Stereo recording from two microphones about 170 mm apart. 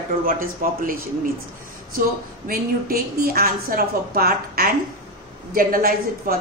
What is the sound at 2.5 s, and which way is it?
A woman's voice, 60° right (ahead or behind).